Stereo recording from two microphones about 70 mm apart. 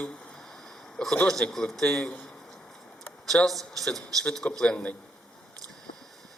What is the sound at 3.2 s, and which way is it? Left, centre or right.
A man's voice, centre.